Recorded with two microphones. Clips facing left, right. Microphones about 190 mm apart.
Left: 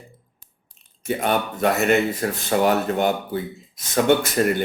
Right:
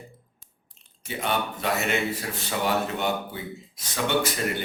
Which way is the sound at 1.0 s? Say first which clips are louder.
Left 6 dB; 50° left (ahead or behind).